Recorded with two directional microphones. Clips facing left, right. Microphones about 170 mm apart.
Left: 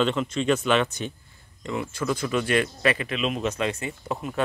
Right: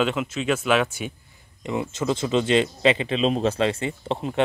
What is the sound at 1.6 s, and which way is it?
Speech, 20° right (ahead or behind).